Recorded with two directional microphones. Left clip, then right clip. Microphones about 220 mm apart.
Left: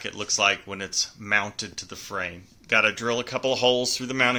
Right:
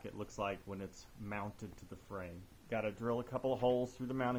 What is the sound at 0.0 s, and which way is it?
Speech, 10° left (ahead or behind).